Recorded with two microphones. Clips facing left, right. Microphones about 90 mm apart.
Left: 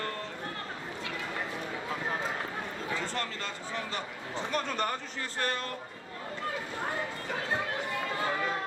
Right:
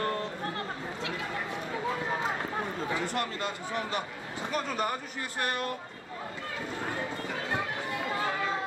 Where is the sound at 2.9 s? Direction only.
15° right (ahead or behind).